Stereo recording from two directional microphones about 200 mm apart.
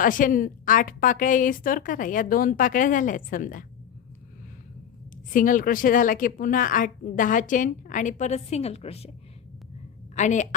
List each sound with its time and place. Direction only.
0.0 s a woman's voice: 40° left (ahead or behind)
5.3 s a woman's voice: 40° left (ahead or behind)
10.2 s a woman's voice: 35° left (ahead or behind)